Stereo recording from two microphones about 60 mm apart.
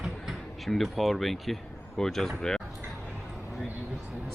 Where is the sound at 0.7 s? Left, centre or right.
Centre.